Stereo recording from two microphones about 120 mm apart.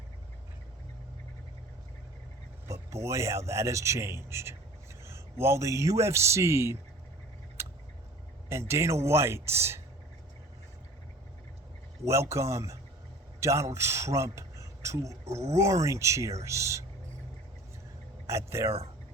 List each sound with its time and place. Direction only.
2.6 s a man's voice: 25° right (ahead or behind)
8.4 s a man's voice: 20° right (ahead or behind)
12.0 s a man's voice: 25° right (ahead or behind)
18.3 s a man's voice: 25° right (ahead or behind)